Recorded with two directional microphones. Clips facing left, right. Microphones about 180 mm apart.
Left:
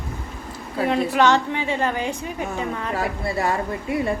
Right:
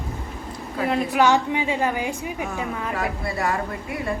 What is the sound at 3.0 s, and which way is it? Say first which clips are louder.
Speech: left 2 dB; 35° left (ahead or behind).